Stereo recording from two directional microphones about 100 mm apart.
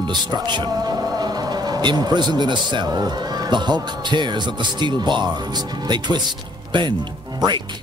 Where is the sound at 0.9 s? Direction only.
40° right (ahead or behind).